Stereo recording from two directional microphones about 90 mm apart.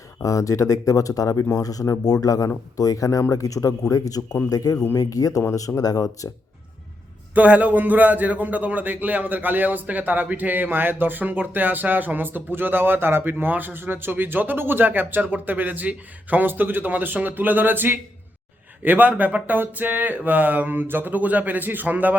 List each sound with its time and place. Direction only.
0.2 s speech: 35° left (ahead or behind)
7.3 s a man's voice: 15° right (ahead or behind)